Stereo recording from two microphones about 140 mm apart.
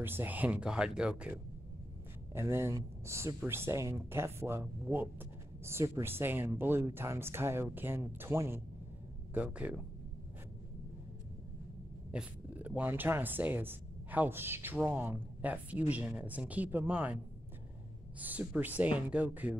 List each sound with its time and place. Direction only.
0.0 s speech: 15° right (ahead or behind)
2.3 s speech: 20° right (ahead or behind)
12.1 s speech: 10° right (ahead or behind)
18.2 s speech: 10° right (ahead or behind)